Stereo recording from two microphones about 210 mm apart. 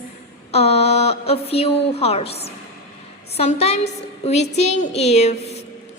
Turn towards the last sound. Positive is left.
turn(degrees=30)  # may be behind; listen again after turning